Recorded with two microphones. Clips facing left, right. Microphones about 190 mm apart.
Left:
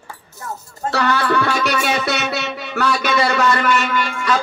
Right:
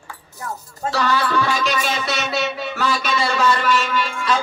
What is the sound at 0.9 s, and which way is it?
Music, 60° left (ahead or behind).